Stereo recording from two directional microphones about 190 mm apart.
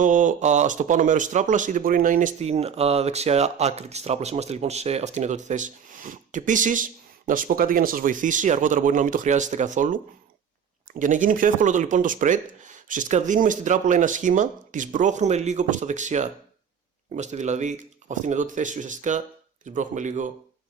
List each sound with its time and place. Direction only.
0.0 s speech: 40° right (ahead or behind)